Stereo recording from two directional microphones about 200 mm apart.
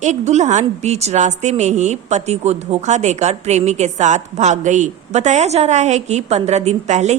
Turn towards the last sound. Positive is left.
turn(degrees=-35)  # may be behind; listen again after turning